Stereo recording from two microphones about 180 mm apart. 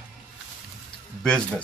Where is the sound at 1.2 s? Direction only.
5° left (ahead or behind).